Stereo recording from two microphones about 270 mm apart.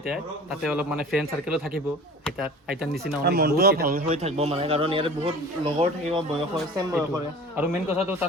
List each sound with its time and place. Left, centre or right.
0.6 s speech: centre
3.2 s a man's voice: right; by 7.7 s centre